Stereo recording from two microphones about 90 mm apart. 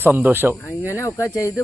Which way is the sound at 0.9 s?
35° left (ahead or behind).